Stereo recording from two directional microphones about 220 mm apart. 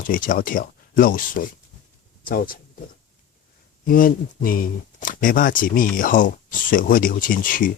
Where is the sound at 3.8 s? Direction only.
40° left (ahead or behind).